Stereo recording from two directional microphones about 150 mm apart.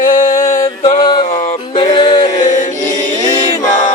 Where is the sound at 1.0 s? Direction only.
30° left (ahead or behind).